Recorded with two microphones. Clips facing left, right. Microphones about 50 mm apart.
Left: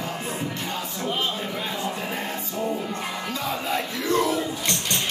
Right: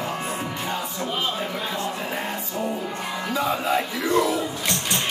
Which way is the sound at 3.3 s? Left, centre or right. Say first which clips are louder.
Right 6 dB; centre.